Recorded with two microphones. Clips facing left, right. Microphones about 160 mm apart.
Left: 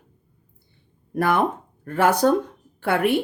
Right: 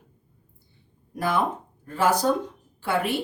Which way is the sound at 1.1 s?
60° left (ahead or behind).